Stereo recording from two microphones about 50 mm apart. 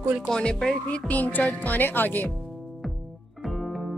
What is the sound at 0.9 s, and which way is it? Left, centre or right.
Speech, left.